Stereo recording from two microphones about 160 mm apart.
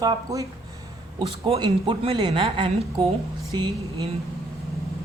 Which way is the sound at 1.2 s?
35° right (ahead or behind).